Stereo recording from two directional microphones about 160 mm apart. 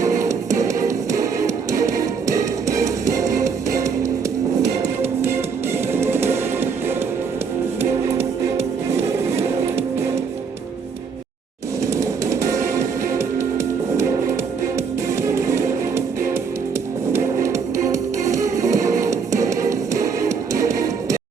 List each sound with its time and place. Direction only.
0.0 s music: 20° right (ahead or behind)
5.9 s music: 15° right (ahead or behind)
8.2 s music: 40° right (ahead or behind)
11.8 s music: 20° right (ahead or behind)
15.2 s music: 20° right (ahead or behind)